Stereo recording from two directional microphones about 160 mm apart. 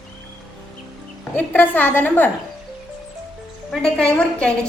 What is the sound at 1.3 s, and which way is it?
Speech, 10° left (ahead or behind).